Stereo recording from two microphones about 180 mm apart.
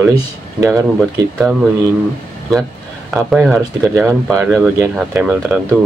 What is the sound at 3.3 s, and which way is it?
Speech, 5° right (ahead or behind).